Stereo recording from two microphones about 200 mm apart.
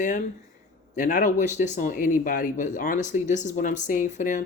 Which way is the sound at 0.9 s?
40° left (ahead or behind).